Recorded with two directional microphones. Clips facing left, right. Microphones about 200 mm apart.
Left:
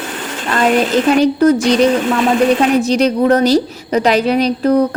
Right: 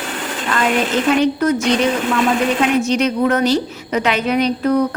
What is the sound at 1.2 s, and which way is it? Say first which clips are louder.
Speech: left 5 dB; 35° left (ahead or behind).